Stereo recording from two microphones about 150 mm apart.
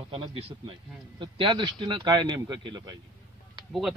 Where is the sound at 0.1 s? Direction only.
40° right (ahead or behind).